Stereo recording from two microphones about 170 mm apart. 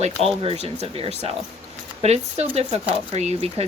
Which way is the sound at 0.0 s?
35° right (ahead or behind).